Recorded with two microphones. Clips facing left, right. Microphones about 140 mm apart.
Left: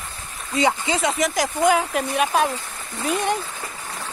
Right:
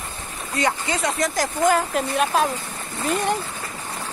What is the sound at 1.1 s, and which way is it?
Speech, centre (ahead or behind).